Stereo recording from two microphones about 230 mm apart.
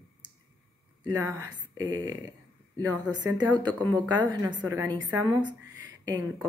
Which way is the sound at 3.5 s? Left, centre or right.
Centre.